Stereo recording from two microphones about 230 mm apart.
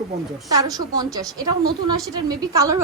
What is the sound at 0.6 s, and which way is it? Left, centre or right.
A woman's voice, centre.